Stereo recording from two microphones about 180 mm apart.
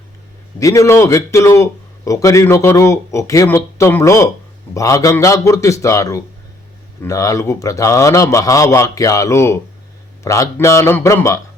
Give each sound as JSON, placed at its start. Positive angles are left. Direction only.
{"t": 0.6, "sound": "a man's voice", "side_deg": 20}